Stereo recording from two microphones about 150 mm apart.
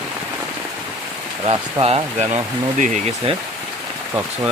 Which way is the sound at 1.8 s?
45° right (ahead or behind).